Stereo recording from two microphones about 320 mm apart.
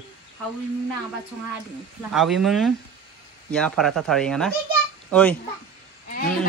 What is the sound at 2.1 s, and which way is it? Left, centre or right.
Speech, centre.